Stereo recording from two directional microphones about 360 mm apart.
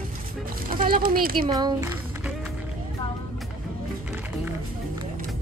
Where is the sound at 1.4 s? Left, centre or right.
Centre.